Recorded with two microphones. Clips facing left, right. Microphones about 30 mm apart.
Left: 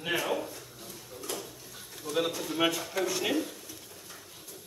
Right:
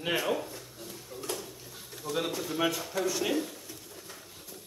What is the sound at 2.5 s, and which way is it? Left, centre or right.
Speech, centre.